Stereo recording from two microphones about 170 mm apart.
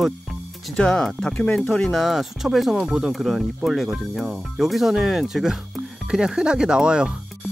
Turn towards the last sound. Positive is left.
turn(degrees=-5)  # may be behind; listen again after turning